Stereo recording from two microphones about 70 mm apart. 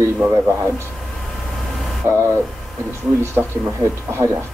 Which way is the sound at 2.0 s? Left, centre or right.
Right.